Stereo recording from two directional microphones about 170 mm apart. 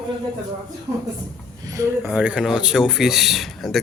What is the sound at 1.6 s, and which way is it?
Speech, 20° right (ahead or behind).